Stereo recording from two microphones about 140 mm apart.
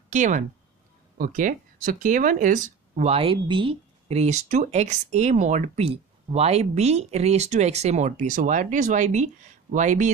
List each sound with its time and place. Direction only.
0.1 s speech: 60° right (ahead or behind)
1.1 s speech: 85° right; by 10.1 s 60° right (ahead or behind)